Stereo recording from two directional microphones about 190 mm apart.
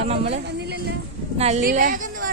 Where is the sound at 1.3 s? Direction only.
35° right (ahead or behind).